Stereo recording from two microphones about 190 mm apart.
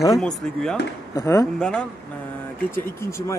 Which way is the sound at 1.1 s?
15° left (ahead or behind).